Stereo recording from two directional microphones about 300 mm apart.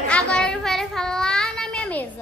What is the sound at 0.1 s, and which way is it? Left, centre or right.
Child singing, centre.